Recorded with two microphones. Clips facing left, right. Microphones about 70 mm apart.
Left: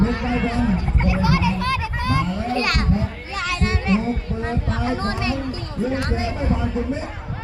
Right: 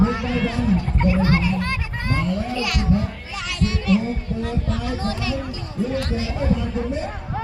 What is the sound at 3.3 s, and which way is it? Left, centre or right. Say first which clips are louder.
Child singing: left 2 dB; left.